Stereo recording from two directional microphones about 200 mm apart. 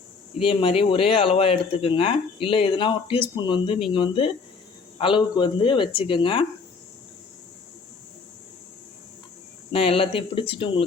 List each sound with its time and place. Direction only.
0.4 s speech: 30° left (ahead or behind)
9.7 s speech: 30° left (ahead or behind)